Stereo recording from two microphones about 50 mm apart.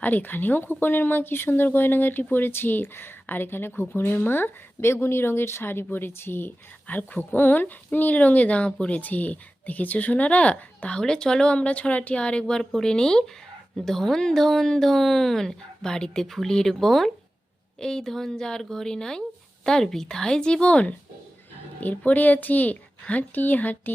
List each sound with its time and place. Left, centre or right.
0.0 s speech: left
6.8 s a woman's voice: left